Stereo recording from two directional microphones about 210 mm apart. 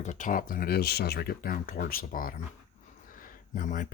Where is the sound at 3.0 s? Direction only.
40° left (ahead or behind).